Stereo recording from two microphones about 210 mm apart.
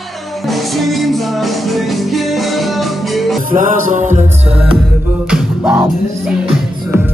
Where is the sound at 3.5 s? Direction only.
40° right (ahead or behind).